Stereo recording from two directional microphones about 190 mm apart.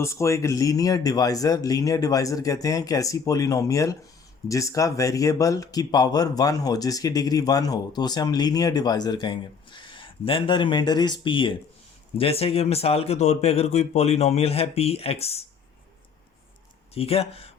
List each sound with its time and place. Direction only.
0.0 s speech: 15° left (ahead or behind); by 15.4 s 30° left (ahead or behind)
16.9 s speech: 30° left (ahead or behind)